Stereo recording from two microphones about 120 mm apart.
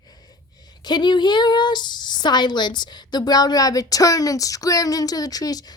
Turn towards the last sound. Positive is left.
turn(degrees=30)  # may be behind; listen again after turning